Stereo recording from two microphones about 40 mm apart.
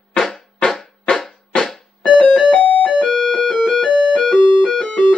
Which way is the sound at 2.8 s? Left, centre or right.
Left.